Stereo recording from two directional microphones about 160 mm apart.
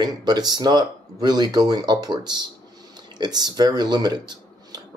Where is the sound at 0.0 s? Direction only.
25° right (ahead or behind).